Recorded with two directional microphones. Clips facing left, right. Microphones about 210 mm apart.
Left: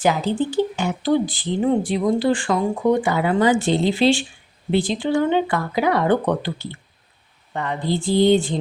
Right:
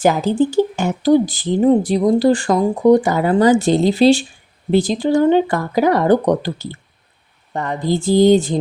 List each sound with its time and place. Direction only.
0.0 s speech: 45° right (ahead or behind)